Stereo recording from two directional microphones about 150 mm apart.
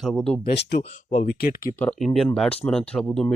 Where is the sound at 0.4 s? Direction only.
90° left.